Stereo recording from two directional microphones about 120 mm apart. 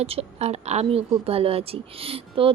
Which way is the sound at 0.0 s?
60° right (ahead or behind).